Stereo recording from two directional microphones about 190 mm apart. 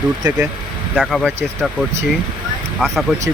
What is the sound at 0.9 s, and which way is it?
Speech, centre (ahead or behind).